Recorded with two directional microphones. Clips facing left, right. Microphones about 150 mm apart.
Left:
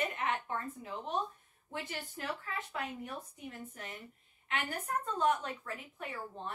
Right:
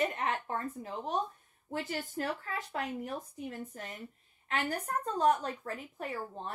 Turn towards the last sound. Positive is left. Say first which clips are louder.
# right 3 dB
turn(degrees=-40)  # may be behind; listen again after turning